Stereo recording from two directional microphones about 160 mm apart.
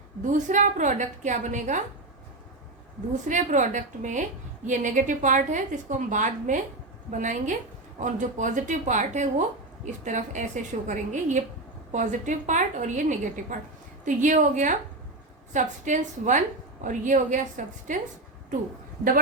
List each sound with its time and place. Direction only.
0.3 s a woman's voice: 50° right (ahead or behind)
3.2 s a woman's voice: 50° right (ahead or behind)